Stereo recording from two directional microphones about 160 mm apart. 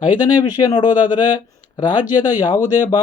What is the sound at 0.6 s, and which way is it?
A man's voice, 25° left (ahead or behind).